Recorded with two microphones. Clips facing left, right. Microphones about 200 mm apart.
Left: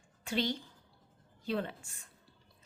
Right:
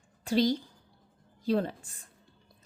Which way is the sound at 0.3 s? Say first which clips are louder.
Right 8 dB; 40° right (ahead or behind).